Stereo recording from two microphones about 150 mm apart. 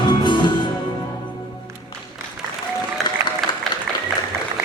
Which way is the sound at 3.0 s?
Centre (ahead or behind).